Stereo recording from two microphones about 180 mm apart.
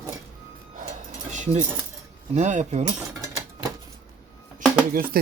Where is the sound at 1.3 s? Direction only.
45° right (ahead or behind).